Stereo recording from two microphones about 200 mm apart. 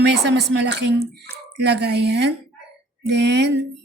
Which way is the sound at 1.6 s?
55° right (ahead or behind).